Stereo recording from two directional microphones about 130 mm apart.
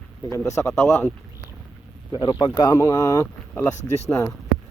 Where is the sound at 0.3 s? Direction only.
20° left (ahead or behind).